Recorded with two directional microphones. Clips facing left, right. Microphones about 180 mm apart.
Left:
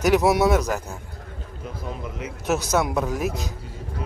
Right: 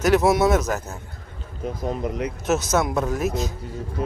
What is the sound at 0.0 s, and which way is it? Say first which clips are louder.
Speech: right 1 dB; 10° left (ahead or behind).